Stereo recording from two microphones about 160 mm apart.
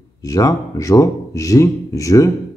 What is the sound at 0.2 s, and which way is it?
A man's voice, 20° left (ahead or behind).